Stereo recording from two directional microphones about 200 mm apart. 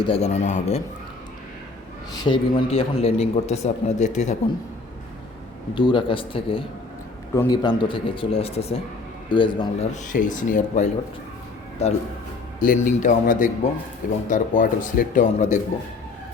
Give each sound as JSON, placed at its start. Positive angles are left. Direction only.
{"t": 0.0, "sound": "a man's voice", "side_deg": 30}
{"t": 2.1, "sound": "a man's voice", "side_deg": 25}
{"t": 5.7, "sound": "speech", "side_deg": 25}
{"t": 9.9, "sound": "a man's voice", "side_deg": 40}